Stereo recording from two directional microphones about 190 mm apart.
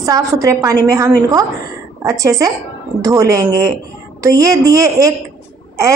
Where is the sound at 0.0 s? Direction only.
15° right (ahead or behind).